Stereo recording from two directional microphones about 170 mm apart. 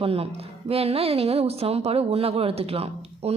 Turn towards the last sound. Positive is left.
turn(degrees=-35)  # may be behind; listen again after turning